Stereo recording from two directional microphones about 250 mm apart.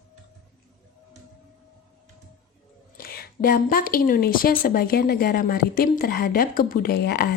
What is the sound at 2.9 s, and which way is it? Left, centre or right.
A woman's voice, left.